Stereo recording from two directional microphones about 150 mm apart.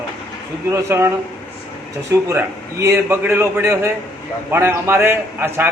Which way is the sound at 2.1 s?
20° right (ahead or behind).